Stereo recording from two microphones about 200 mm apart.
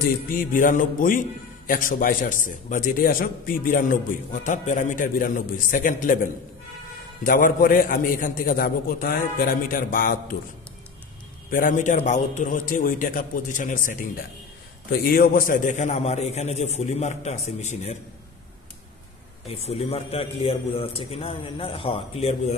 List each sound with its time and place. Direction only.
0.3 s a man's voice: 45° left (ahead or behind)
7.2 s a man's voice: 45° left (ahead or behind)
11.5 s a man's voice: 40° left (ahead or behind)
19.4 s a man's voice: 30° left (ahead or behind)